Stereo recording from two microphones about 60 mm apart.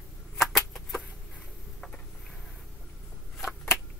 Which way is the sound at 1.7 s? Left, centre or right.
Centre.